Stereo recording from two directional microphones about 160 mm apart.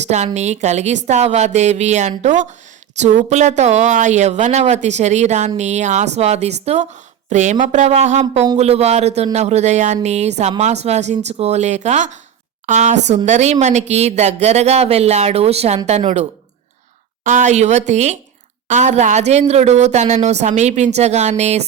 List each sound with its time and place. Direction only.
0.0 s a woman's voice: 45° right (ahead or behind)
17.2 s a woman's voice: 50° right (ahead or behind)